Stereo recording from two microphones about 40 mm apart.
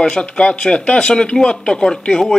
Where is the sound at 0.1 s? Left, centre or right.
Left.